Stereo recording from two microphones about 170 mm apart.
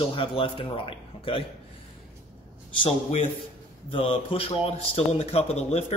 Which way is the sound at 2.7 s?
30° left (ahead or behind).